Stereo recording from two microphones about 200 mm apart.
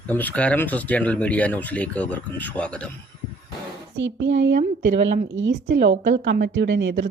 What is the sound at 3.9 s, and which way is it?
A woman's voice, 65° right (ahead or behind).